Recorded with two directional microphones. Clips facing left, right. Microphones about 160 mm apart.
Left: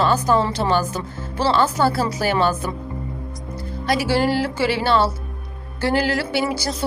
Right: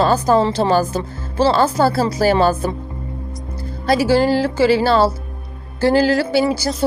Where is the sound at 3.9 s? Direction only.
30° right (ahead or behind).